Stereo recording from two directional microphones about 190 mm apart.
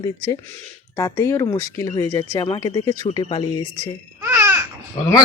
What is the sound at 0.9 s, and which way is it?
Speech, 15° left (ahead or behind).